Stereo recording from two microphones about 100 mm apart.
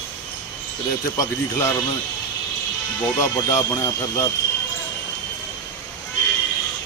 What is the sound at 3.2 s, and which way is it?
Speech, 30° left (ahead or behind).